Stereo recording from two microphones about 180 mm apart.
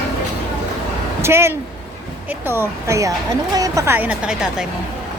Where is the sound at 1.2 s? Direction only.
15° right (ahead or behind).